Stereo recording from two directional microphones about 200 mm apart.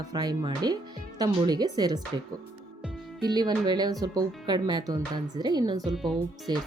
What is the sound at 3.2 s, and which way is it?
Speech, 20° right (ahead or behind).